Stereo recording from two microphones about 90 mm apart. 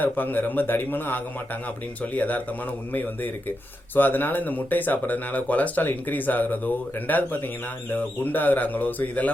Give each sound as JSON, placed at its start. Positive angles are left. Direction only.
{"t": 0.0, "sound": "speech", "side_deg": 20}
{"t": 3.9, "sound": "speech", "side_deg": 20}